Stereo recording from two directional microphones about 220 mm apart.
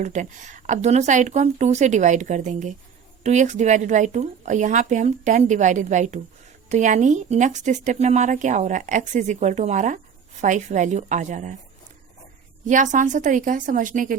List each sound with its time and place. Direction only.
0.0 s speech: 35° right (ahead or behind)
12.6 s speech: 35° right (ahead or behind)